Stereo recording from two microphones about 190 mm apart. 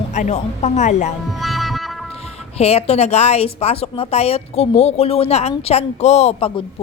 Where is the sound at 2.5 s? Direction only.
35° left (ahead or behind).